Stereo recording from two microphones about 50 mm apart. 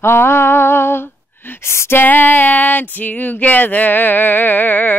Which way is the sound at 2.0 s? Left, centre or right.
Left.